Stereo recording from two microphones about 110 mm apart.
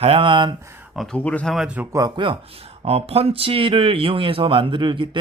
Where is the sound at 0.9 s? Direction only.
5° left (ahead or behind).